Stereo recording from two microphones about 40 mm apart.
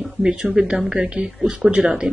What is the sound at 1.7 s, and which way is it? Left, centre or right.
Speech, centre.